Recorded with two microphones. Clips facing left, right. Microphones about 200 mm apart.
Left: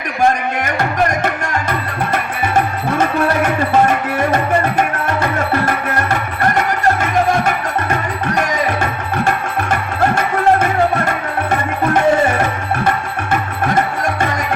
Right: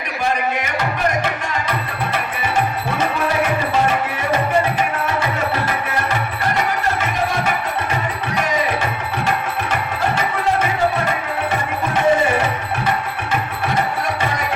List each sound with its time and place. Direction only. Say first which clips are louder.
0.6 s music: left 4 dB; 50° left (ahead or behind)
3.4 s music: left 4 dB; 50° left (ahead or behind)
5.6 s music: left 4 dB; 55° left (ahead or behind)